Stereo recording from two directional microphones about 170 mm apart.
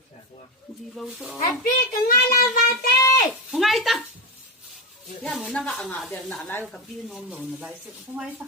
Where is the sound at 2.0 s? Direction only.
55° left (ahead or behind).